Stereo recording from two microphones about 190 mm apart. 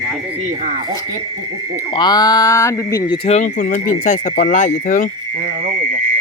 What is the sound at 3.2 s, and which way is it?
Speech, 35° left (ahead or behind).